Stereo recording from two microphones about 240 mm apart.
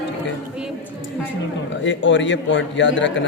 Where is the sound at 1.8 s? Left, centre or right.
Left.